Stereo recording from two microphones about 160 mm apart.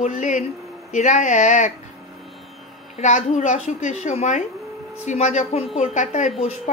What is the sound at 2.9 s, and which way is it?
A woman's voice, 45° left (ahead or behind).